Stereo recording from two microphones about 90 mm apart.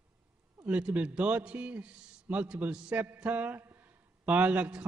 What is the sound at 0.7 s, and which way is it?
A man's voice, 15° right (ahead or behind).